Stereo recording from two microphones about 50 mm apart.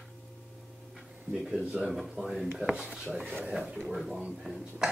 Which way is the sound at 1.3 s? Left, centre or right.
Centre.